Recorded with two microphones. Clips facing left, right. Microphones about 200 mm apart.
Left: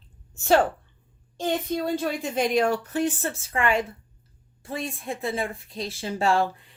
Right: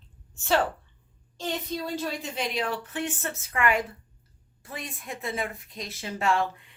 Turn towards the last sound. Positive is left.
turn(degrees=35)  # may be behind; listen again after turning